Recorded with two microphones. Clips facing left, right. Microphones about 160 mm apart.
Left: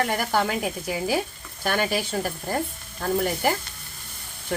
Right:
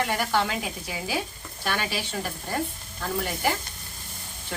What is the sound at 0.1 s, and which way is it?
A woman's voice, 45° left (ahead or behind).